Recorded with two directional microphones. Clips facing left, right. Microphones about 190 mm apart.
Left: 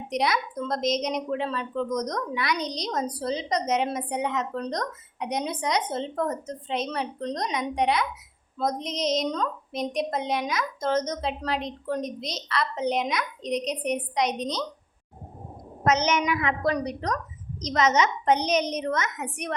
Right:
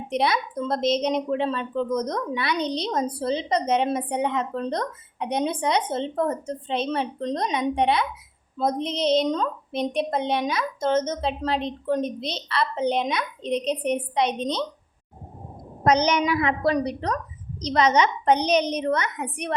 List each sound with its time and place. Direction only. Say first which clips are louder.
0.1 s speech: right 2 dB; 30° right (ahead or behind)
15.8 s a woman's voice: right 3 dB; 35° right (ahead or behind)